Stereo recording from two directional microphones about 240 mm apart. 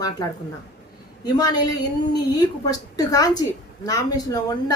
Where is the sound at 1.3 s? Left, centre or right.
Centre.